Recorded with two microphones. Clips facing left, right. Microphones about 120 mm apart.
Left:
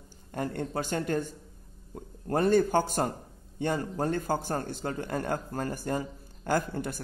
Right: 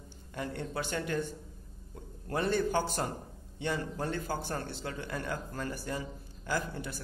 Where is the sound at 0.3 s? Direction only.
45° left (ahead or behind).